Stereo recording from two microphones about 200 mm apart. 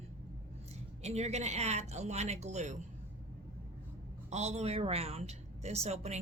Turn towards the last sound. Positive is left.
turn(degrees=-30)  # may be behind; listen again after turning